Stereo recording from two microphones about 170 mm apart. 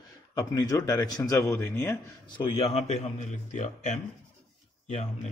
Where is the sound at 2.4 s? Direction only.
35° left (ahead or behind).